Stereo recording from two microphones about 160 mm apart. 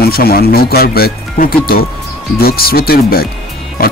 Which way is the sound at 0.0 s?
75° left (ahead or behind).